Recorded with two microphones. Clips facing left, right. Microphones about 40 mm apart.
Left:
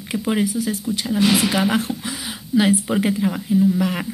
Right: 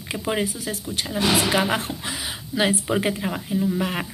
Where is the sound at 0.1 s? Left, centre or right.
Right.